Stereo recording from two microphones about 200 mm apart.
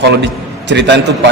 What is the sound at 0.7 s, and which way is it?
Speech, 60° right (ahead or behind).